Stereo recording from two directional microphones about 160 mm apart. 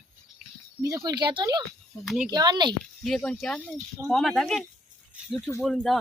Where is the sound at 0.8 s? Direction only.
20° right (ahead or behind).